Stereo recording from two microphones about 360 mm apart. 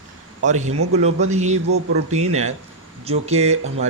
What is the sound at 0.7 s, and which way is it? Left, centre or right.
Speech, right.